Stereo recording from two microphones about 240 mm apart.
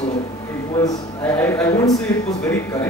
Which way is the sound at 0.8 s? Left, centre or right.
Centre.